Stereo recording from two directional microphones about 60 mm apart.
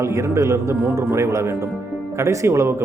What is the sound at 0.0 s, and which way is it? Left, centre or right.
Speech, right.